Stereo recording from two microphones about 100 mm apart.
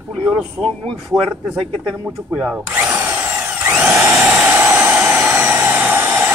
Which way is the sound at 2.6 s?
20° right (ahead or behind).